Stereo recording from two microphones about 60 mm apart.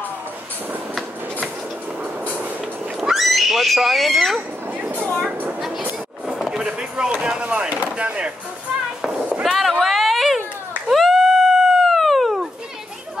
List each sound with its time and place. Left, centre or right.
3.0 s neigh: centre
6.2 s speech: centre
9.4 s a sound: centre